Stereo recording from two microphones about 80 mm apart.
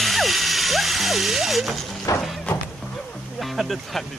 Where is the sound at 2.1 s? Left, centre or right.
Left.